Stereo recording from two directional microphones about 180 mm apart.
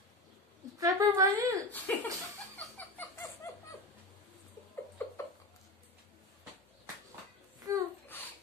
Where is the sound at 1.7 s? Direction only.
10° left (ahead or behind).